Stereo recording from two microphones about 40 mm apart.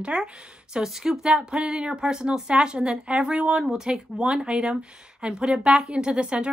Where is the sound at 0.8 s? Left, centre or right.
Centre.